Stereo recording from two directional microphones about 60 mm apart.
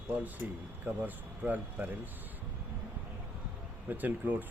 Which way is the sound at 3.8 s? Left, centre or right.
Right.